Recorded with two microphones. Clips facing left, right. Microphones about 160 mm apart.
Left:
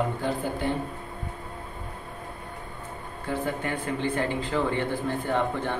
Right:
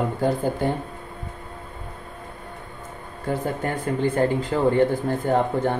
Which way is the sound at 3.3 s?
50° right (ahead or behind).